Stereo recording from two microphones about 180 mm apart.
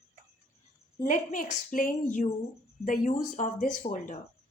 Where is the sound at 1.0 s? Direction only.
45° left (ahead or behind).